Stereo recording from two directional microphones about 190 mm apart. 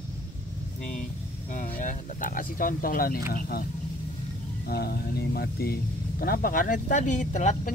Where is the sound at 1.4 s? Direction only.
45° left (ahead or behind).